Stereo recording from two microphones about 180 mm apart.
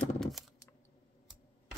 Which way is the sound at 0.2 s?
Centre (ahead or behind).